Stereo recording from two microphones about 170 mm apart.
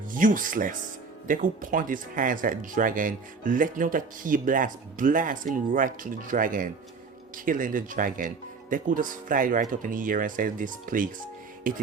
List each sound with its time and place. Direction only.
0.1 s speech: 50° right (ahead or behind)